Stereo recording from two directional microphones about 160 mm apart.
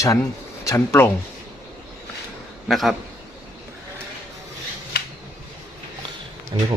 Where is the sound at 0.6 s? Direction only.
20° left (ahead or behind).